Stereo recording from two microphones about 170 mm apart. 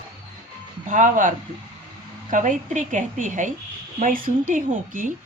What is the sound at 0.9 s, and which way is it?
A woman's voice, 50° right (ahead or behind).